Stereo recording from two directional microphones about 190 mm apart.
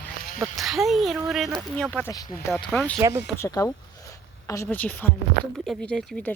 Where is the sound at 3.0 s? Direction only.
15° right (ahead or behind).